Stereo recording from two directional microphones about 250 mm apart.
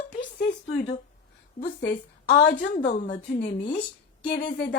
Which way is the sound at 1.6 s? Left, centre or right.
Left.